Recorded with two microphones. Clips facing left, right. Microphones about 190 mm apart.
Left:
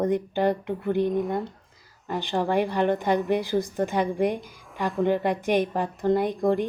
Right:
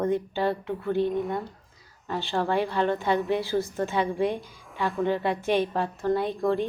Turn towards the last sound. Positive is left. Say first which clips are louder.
# left 2 dB
turn(degrees=15)  # may be behind; listen again after turning